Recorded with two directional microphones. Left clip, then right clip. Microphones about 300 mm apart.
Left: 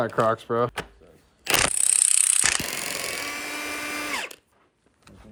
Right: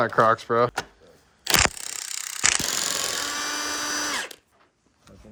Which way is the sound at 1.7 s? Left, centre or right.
Right.